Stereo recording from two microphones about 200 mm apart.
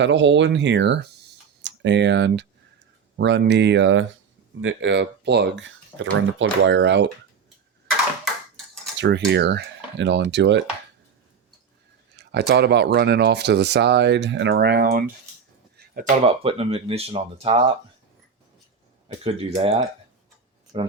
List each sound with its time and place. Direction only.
0.0 s speech: 65° right (ahead or behind)
9.0 s speech: 60° right (ahead or behind)
12.1 s speech: 55° right (ahead or behind)
16.0 s speech: 35° right (ahead or behind)
19.0 s speech: 30° right (ahead or behind)